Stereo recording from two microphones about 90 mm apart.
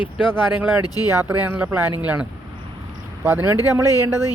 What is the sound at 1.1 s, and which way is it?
Speech, 20° right (ahead or behind).